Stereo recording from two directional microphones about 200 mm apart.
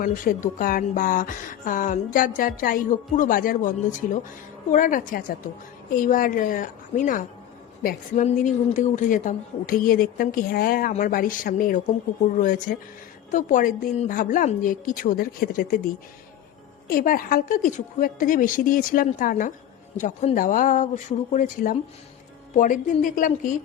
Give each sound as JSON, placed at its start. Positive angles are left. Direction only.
{"t": 0.0, "sound": "speech", "side_deg": 45}
{"t": 16.9, "sound": "speech", "side_deg": 45}